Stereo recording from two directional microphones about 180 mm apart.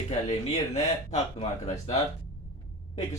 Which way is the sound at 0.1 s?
40° left (ahead or behind).